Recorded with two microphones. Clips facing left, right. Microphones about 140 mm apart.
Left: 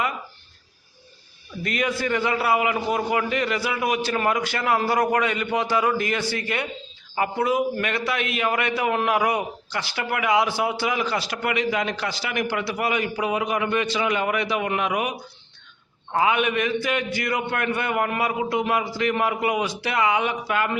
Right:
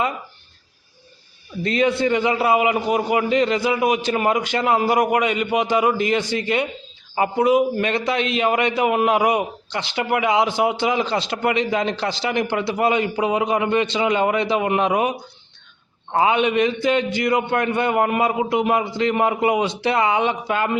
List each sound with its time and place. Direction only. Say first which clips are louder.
1.6 s a man's voice: right 6 dB; 25° right (ahead or behind)